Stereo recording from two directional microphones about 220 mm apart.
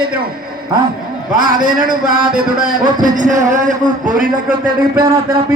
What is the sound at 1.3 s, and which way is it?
A man's voice, 40° right (ahead or behind).